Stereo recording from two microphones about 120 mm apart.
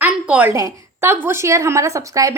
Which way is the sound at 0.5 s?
25° right (ahead or behind).